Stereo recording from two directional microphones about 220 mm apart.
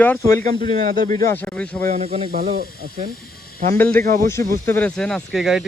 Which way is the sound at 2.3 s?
40° right (ahead or behind).